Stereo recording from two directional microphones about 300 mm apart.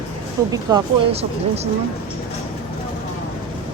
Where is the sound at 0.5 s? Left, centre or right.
Centre.